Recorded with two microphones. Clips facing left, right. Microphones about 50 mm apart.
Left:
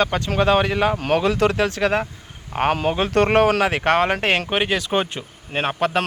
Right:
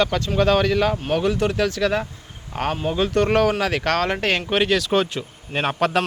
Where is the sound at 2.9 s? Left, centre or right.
Left; by 5.6 s centre.